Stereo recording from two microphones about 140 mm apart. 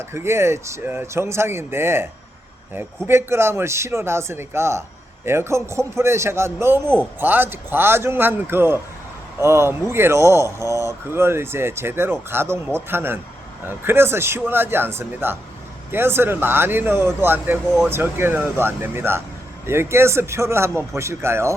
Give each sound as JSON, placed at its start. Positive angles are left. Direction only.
{"t": 0.0, "sound": "speech", "side_deg": -20}
{"t": 3.1, "sound": "speech", "side_deg": -20}